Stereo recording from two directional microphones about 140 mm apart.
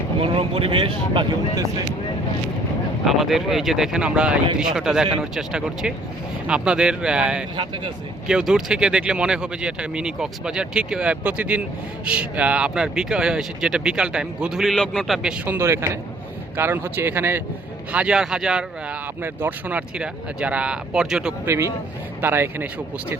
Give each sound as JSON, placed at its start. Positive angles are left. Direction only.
{"t": 0.2, "sound": "speech", "side_deg": -40}
{"t": 3.0, "sound": "speech", "side_deg": 0}
{"t": 15.5, "sound": "a man's voice", "side_deg": -20}
{"t": 21.4, "sound": "speech", "side_deg": -20}